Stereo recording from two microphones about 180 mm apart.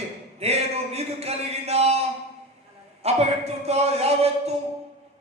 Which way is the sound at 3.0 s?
35° right (ahead or behind).